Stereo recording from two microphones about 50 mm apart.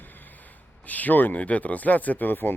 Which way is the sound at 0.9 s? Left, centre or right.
Left.